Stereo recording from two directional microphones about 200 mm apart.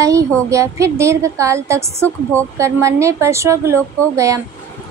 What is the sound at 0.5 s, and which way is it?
A woman's voice, 15° right (ahead or behind).